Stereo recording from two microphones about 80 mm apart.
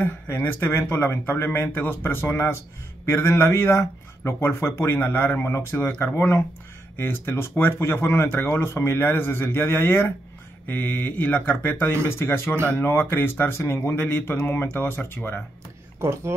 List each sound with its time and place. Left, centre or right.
0.0 s speech: left
16.0 s speech: right